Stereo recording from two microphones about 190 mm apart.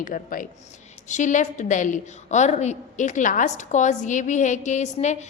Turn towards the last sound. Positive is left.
turn(degrees=35)  # may be behind; listen again after turning